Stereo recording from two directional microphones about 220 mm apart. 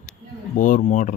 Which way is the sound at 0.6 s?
35° left (ahead or behind).